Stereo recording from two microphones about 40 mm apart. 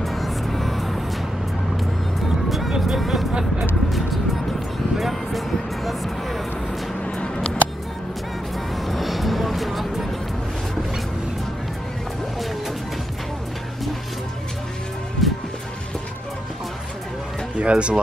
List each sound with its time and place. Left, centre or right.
0.0 s music: centre
2.9 s vehicle: centre
4.9 s music: centre
7.1 s a sound: left
8.7 s music: centre
15.2 s music: centre
17.6 s speech: right